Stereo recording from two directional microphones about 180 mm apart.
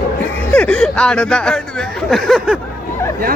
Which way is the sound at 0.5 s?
5° left (ahead or behind).